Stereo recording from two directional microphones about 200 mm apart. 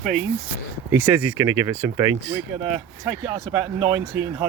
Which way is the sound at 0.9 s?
10° right (ahead or behind).